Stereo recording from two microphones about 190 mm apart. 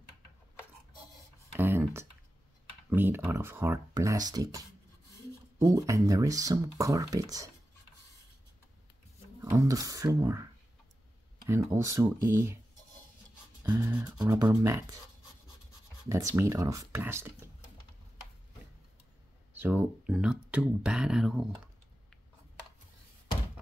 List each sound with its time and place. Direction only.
1.5 s a sound: 10° right (ahead or behind)
2.9 s speech: 10° right (ahead or behind)
9.4 s speech: 15° right (ahead or behind)
13.7 s speech: 10° right (ahead or behind)
14.1 s speech: 20° right (ahead or behind)
16.1 s speech: 15° right (ahead or behind)
19.6 s speech: 10° right (ahead or behind)